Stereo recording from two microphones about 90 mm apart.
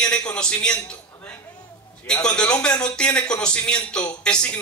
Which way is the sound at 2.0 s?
10° left (ahead or behind).